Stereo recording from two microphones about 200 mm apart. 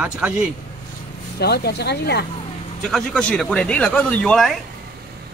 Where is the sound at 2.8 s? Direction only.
5° left (ahead or behind).